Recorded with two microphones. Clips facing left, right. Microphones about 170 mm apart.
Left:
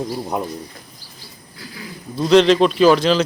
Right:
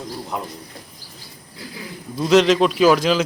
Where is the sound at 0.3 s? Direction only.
20° left (ahead or behind).